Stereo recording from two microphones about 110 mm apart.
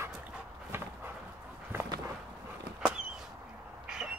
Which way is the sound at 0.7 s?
20° right (ahead or behind).